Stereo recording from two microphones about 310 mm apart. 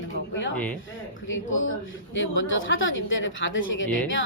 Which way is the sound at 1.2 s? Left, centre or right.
Left.